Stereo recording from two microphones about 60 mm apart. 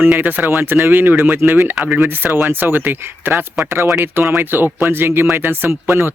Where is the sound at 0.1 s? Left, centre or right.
Right.